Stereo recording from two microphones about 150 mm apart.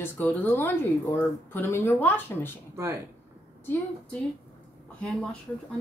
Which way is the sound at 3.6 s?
15° left (ahead or behind).